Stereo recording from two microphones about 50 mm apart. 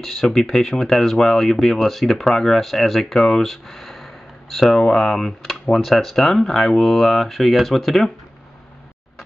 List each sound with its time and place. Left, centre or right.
0.0 s speech: centre